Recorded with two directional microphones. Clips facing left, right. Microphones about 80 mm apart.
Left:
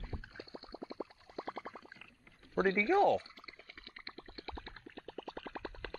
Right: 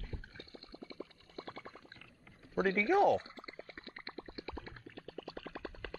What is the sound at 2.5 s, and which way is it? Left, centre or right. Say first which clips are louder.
Speech: even; centre.